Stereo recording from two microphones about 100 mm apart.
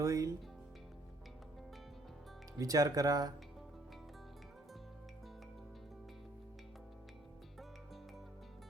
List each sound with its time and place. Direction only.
0.0 s speech: 35° right (ahead or behind)
2.6 s speech: 35° right (ahead or behind)